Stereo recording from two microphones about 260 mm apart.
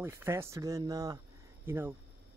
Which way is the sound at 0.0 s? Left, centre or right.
Centre.